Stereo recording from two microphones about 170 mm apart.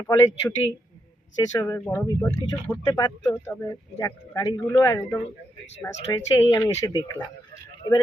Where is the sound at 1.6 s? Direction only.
15° left (ahead or behind).